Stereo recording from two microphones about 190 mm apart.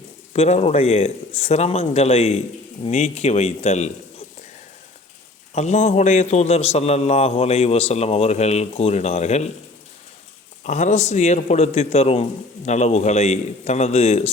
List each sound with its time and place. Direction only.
0.3 s a man's voice: 35° left (ahead or behind)
5.5 s a man's voice: 35° left (ahead or behind)
10.6 s a man's voice: 40° left (ahead or behind)